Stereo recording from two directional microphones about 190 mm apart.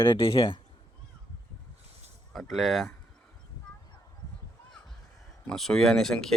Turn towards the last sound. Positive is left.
turn(degrees=0)  # may be behind; listen again after turning